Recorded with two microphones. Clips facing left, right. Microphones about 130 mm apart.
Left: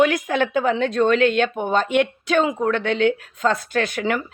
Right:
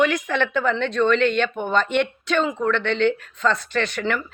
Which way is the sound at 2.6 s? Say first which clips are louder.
Left 1 dB; 40° left (ahead or behind).